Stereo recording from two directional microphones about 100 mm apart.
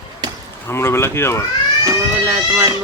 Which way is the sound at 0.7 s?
25° left (ahead or behind).